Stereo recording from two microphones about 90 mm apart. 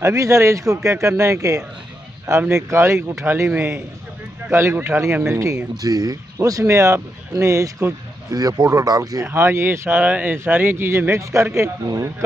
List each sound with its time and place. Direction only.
0.0 s a man's voice: 35° right (ahead or behind)
5.8 s a man's voice: 40° right (ahead or behind)
9.2 s a man's voice: 25° right (ahead or behind)